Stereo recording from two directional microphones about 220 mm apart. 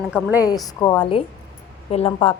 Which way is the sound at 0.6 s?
15° left (ahead or behind).